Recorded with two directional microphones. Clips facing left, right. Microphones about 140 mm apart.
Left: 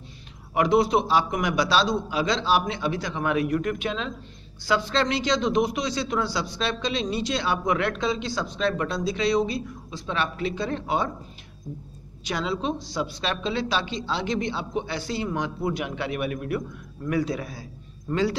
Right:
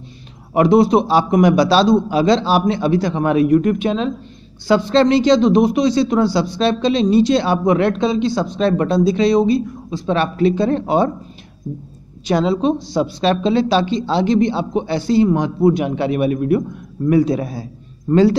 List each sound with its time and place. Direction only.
0.6 s a man's voice: 35° right (ahead or behind)
12.3 s a man's voice: 35° right (ahead or behind)